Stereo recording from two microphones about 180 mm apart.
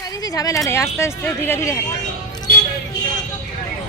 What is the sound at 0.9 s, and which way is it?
Speech, 15° left (ahead or behind).